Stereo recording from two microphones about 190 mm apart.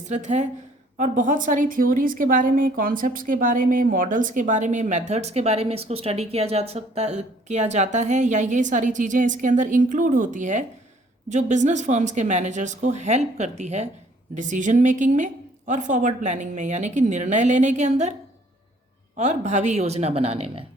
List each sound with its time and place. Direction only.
0.1 s a woman's voice: 35° right (ahead or behind)
19.1 s a woman's voice: 35° right (ahead or behind)